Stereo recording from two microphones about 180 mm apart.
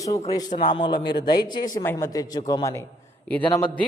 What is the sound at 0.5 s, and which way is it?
Speech, 45° left (ahead or behind).